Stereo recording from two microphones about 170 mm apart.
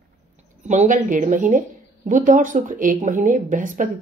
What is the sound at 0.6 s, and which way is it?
A woman's voice, 45° right (ahead or behind).